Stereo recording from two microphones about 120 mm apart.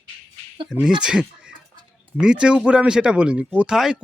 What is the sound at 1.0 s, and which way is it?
Speech, 10° right (ahead or behind).